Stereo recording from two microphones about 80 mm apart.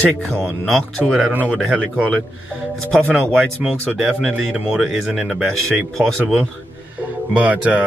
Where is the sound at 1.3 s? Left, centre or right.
Right.